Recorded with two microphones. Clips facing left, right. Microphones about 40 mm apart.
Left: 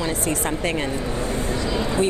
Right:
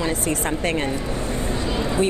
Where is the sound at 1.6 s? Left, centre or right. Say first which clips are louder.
Even; right.